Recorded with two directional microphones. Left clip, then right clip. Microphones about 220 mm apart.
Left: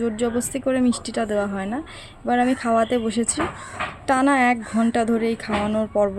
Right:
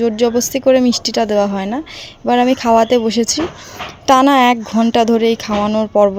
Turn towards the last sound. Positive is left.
turn(degrees=-25)  # may be behind; listen again after turning